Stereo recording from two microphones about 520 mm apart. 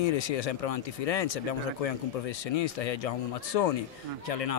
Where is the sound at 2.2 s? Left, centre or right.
Left.